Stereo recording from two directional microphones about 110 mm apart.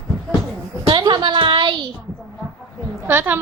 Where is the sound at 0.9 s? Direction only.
40° right (ahead or behind).